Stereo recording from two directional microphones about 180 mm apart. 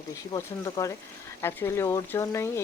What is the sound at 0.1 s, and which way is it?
Speech, 15° left (ahead or behind).